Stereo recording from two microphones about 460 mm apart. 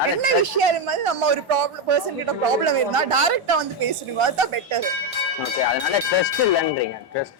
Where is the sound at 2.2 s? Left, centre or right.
Right.